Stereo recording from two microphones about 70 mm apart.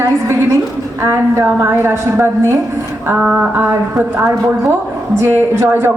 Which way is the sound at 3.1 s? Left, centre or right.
Centre.